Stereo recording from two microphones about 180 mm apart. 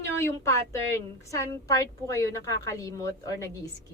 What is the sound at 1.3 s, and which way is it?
Speech, 15° left (ahead or behind).